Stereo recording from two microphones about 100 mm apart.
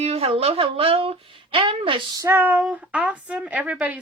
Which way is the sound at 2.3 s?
20° right (ahead or behind).